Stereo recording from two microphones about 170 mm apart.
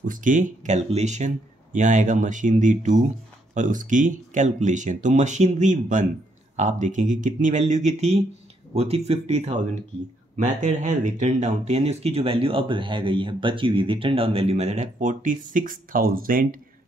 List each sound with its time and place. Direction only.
0.0 s speech: 50° right (ahead or behind)